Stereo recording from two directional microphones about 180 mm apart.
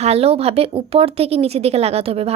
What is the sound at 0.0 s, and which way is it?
A woman's voice, 35° right (ahead or behind).